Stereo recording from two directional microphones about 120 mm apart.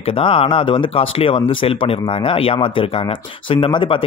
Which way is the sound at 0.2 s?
50° left (ahead or behind).